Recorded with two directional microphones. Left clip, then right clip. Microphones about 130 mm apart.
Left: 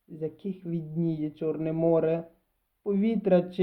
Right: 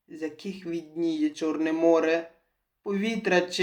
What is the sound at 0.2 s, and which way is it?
Speech, 55° left (ahead or behind).